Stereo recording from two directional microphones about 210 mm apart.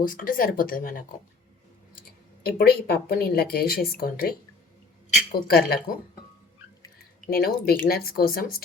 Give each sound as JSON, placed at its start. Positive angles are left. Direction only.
{"t": 0.0, "sound": "speech", "side_deg": 40}
{"t": 2.4, "sound": "speech", "side_deg": 50}
{"t": 7.3, "sound": "speech", "side_deg": 45}